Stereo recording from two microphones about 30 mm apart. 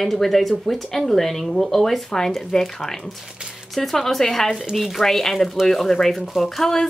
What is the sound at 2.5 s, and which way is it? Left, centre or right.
Speech, centre.